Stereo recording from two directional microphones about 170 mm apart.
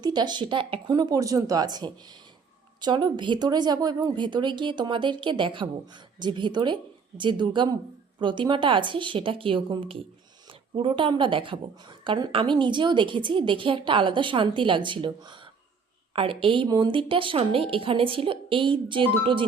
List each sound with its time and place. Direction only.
0.0 s a woman's voice: 25° right (ahead or behind)